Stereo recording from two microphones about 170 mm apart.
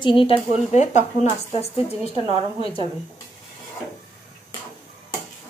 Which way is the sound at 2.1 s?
35° right (ahead or behind).